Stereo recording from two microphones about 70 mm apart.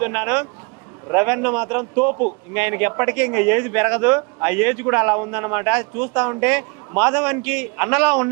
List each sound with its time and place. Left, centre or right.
0.0 s a man's voice: right